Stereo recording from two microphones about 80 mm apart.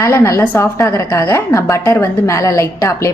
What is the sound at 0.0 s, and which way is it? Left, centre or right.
A woman's voice, left.